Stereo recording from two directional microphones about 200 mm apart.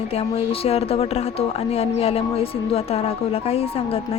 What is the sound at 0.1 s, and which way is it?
Speech, 30° left (ahead or behind).